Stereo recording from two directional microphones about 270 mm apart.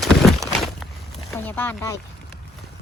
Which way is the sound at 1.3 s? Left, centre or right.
Centre.